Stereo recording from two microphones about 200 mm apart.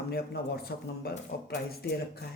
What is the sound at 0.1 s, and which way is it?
Speech, 55° left (ahead or behind).